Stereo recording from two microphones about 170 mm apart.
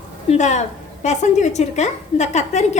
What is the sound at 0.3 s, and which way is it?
A woman's voice, 45° left (ahead or behind).